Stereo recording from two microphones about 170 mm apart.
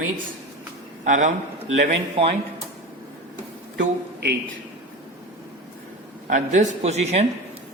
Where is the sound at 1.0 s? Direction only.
45° right (ahead or behind).